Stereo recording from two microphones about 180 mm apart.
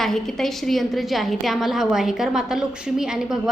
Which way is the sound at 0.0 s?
Centre (ahead or behind).